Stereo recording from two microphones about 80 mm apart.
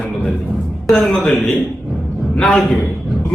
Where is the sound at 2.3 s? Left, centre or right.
Centre.